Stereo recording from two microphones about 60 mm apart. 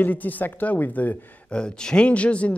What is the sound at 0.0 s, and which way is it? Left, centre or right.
Speech, left.